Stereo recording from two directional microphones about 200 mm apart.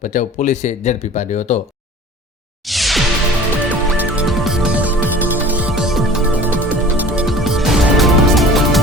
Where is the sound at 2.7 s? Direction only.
Centre (ahead or behind).